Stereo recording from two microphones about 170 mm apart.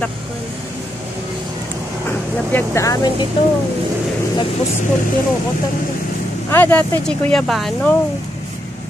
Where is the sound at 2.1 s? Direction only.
10° left (ahead or behind).